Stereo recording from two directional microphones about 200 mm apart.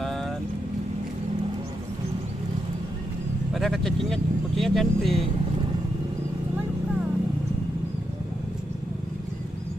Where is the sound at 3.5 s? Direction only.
Centre (ahead or behind).